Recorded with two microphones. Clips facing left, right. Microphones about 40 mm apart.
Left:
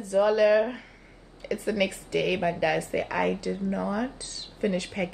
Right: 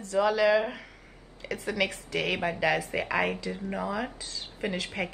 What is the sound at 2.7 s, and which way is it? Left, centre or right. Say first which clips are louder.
Speech: left 1 dB; right.